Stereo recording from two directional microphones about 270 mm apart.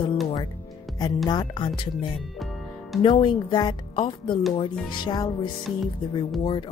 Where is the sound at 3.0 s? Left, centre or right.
Centre.